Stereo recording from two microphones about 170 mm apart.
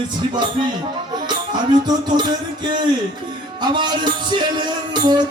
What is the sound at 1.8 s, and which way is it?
Music, 25° right (ahead or behind).